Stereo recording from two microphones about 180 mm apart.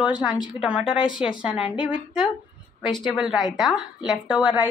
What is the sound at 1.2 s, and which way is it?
Speech, 5° right (ahead or behind).